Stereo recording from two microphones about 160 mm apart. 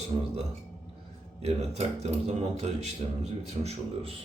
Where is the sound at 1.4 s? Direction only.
40° right (ahead or behind).